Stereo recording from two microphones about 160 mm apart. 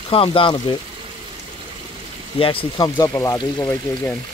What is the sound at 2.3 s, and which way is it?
Speech, 35° left (ahead or behind).